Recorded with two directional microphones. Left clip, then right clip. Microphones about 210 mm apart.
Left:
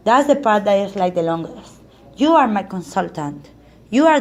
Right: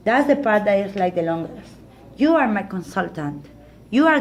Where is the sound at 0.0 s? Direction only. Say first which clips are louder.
Left 4 dB; 35° left (ahead or behind).